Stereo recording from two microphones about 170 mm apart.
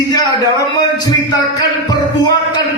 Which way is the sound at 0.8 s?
25° left (ahead or behind).